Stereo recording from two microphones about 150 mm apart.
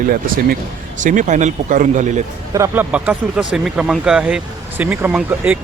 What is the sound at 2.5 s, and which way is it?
Speech, 15° right (ahead or behind).